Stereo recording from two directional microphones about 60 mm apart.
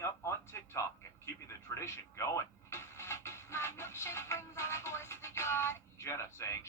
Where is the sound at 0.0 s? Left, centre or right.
Left.